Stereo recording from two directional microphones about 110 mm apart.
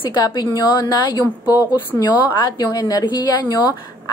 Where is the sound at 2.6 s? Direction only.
35° left (ahead or behind).